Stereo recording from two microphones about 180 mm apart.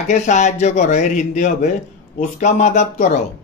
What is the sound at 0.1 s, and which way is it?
Speech, 40° left (ahead or behind).